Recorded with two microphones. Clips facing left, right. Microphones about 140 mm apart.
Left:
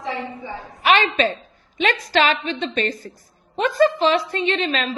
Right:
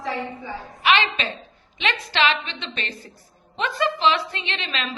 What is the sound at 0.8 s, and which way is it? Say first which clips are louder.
A woman's voice: left 4 dB; 45° left (ahead or behind).